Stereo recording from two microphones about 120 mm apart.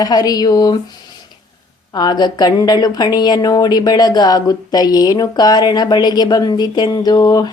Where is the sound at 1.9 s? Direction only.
35° left (ahead or behind).